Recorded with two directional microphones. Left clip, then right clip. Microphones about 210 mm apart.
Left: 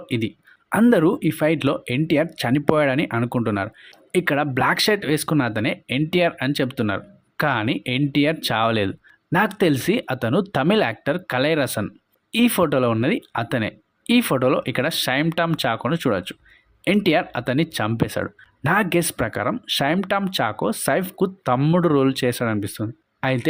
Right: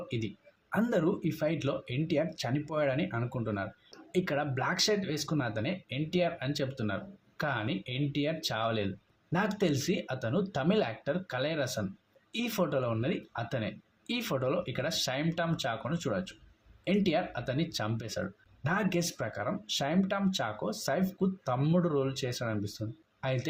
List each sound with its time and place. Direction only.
0.7 s speech: 45° left (ahead or behind)